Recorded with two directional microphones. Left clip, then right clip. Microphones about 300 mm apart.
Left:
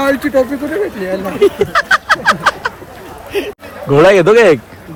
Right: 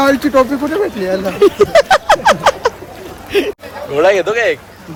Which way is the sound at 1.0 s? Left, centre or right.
Right.